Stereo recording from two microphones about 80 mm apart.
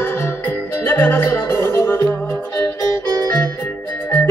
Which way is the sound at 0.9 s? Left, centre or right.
Left.